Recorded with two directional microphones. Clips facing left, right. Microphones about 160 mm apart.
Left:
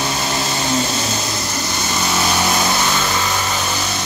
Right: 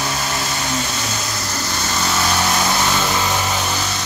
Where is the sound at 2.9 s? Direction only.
10° right (ahead or behind).